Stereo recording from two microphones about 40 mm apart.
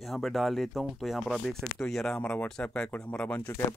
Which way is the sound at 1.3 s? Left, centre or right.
Centre.